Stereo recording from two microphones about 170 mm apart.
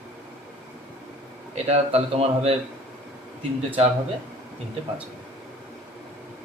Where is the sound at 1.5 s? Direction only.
40° right (ahead or behind).